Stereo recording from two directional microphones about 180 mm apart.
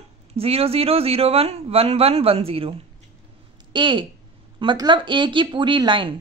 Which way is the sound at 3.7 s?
25° right (ahead or behind).